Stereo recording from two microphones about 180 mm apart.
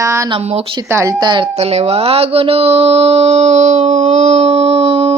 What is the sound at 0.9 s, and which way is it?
A woman's voice, 15° right (ahead or behind).